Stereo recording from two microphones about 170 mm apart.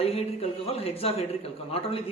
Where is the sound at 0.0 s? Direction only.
35° left (ahead or behind).